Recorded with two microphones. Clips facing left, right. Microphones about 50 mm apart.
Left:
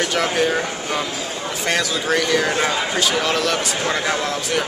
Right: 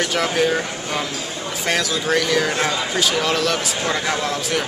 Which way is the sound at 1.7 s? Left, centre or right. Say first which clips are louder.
Even; centre.